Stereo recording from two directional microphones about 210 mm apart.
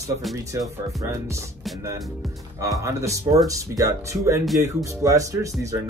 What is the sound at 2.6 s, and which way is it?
Speech, 15° right (ahead or behind).